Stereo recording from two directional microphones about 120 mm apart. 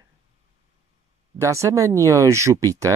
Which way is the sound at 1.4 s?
25° right (ahead or behind).